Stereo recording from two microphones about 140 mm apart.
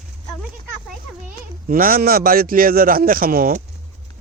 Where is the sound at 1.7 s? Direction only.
90° right.